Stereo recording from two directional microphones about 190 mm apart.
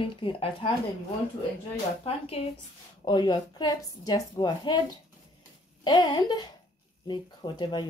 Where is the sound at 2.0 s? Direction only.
30° left (ahead or behind).